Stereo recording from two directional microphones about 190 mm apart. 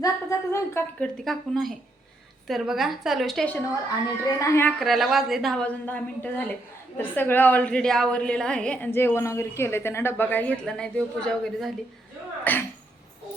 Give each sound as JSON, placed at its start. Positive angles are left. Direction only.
{"t": 0.0, "sound": "a sound", "side_deg": 15}
{"t": 2.5, "sound": "speech", "side_deg": 0}
{"t": 4.3, "sound": "a woman's voice", "side_deg": 15}
{"t": 4.8, "sound": "a woman's voice", "side_deg": 0}